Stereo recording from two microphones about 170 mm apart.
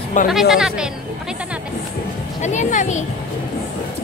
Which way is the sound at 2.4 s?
45° left (ahead or behind).